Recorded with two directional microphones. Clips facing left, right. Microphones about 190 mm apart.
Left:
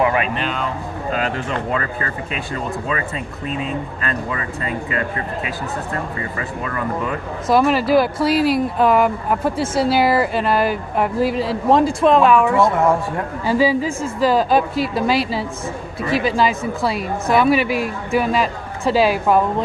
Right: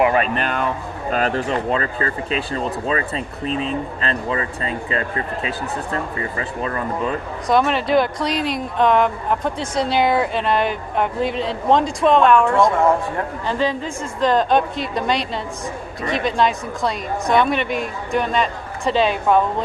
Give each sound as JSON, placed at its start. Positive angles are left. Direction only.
{"t": 0.3, "sound": "speech", "side_deg": -55}
{"t": 1.5, "sound": "speech", "side_deg": -30}
{"t": 7.4, "sound": "speech", "side_deg": 5}